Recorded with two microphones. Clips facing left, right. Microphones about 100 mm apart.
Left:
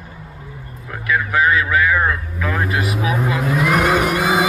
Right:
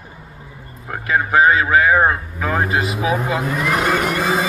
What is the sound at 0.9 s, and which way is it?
Vehicle, 35° right (ahead or behind).